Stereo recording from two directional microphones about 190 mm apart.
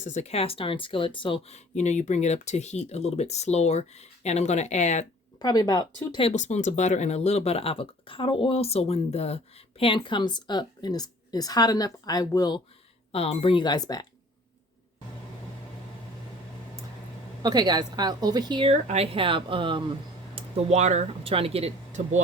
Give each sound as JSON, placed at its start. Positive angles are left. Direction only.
{"t": 0.0, "sound": "speech", "side_deg": 35}
{"t": 5.4, "sound": "speech", "side_deg": 20}
{"t": 17.4, "sound": "a woman's voice", "side_deg": -20}